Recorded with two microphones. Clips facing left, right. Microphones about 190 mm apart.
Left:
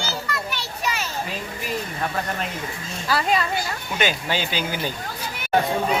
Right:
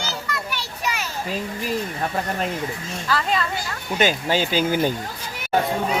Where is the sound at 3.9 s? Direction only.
40° right (ahead or behind).